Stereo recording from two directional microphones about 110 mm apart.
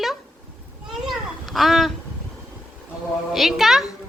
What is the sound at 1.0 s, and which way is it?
Children playing, centre (ahead or behind).